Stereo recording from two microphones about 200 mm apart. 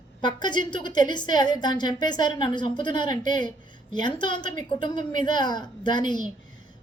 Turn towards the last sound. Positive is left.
turn(degrees=20)  # may be behind; listen again after turning